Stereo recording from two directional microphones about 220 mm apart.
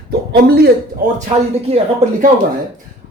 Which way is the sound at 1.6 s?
30° right (ahead or behind).